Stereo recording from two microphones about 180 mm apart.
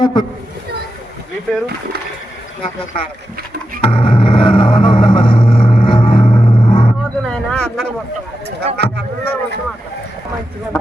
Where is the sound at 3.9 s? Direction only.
30° left (ahead or behind).